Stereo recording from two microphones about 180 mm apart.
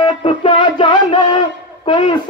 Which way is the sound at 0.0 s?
30° left (ahead or behind).